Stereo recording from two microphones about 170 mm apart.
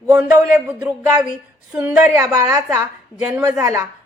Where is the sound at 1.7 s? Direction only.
10° right (ahead or behind).